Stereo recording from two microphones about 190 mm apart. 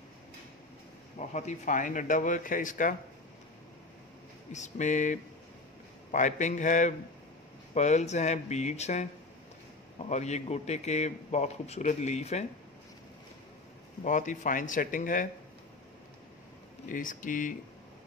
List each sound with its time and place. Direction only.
1.3 s speech: 40° left (ahead or behind)
4.5 s a man's voice: 40° left (ahead or behind)
14.0 s speech: 40° left (ahead or behind)
16.9 s speech: 45° left (ahead or behind)